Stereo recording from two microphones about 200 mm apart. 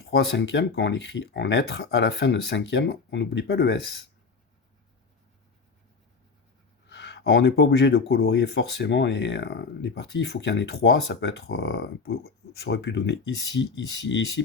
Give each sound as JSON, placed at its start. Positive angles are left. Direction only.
{"t": 0.0, "sound": "speech", "side_deg": 55}
{"t": 6.8, "sound": "speech", "side_deg": 60}